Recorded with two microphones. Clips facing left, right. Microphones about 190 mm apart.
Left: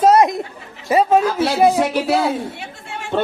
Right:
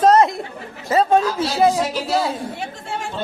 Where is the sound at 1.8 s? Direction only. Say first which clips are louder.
Left 4 dB; 60° left (ahead or behind).